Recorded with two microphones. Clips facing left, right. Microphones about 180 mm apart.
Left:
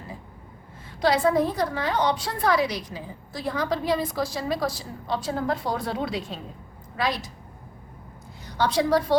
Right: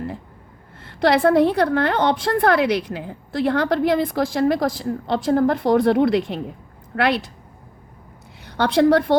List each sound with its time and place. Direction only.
0.8 s a woman's voice: 65° right (ahead or behind)
8.4 s a woman's voice: 60° right (ahead or behind)